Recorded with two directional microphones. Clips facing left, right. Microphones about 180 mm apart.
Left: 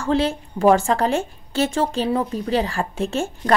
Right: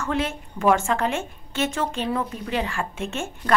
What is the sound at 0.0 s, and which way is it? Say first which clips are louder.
A woman's voice: left 6 dB; 30° left (ahead or behind).